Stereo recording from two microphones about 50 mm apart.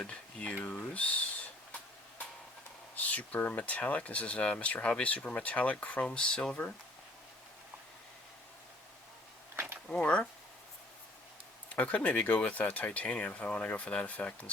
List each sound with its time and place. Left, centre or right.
0.0 s speech: left
2.9 s speech: left; by 6.6 s centre
9.9 s speech: left
11.7 s speech: left